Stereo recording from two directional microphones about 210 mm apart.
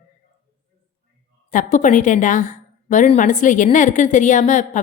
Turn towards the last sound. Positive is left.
turn(degrees=35)  # may be behind; listen again after turning